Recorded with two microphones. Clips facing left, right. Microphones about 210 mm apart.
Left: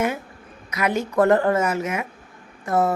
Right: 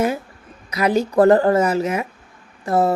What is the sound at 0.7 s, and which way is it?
A woman's voice, 35° right (ahead or behind).